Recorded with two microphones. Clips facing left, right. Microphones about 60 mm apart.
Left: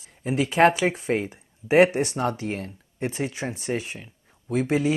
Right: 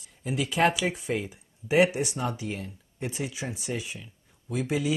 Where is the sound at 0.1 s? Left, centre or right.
Left.